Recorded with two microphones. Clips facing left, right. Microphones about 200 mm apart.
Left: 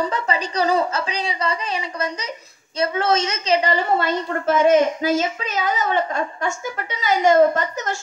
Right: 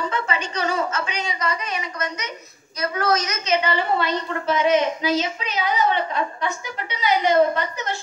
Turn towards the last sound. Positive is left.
turn(degrees=45)  # may be behind; listen again after turning